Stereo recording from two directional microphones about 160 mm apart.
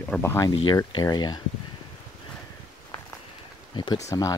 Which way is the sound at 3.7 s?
30° left (ahead or behind).